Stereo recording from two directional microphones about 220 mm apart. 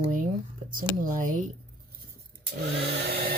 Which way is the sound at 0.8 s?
35° right (ahead or behind).